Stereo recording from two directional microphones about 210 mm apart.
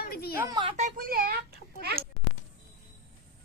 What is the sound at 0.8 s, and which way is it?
Speech, 40° right (ahead or behind).